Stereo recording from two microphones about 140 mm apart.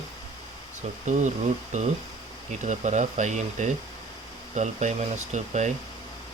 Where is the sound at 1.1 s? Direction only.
60° right (ahead or behind).